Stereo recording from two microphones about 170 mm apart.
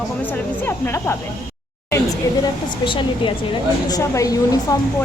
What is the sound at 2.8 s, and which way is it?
A woman's voice, 30° left (ahead or behind).